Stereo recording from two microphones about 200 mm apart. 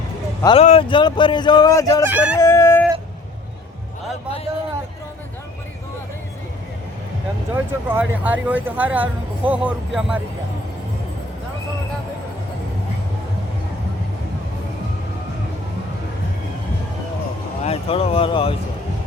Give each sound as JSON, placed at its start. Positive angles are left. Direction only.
{"t": 0.4, "sound": "speech", "side_deg": 30}
{"t": 2.0, "sound": "speech", "side_deg": -10}
{"t": 2.3, "sound": "speech", "side_deg": 15}
{"t": 7.5, "sound": "speech", "side_deg": -10}
{"t": 17.6, "sound": "speech", "side_deg": 30}